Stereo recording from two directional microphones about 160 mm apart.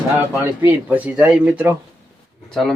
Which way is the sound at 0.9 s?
10° right (ahead or behind).